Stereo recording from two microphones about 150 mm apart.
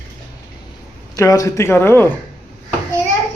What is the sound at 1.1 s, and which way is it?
A man's voice, 20° left (ahead or behind).